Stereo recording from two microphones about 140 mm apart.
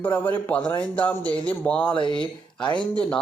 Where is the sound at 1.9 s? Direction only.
35° left (ahead or behind).